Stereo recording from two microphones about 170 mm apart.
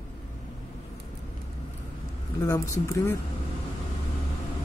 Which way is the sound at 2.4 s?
20° left (ahead or behind).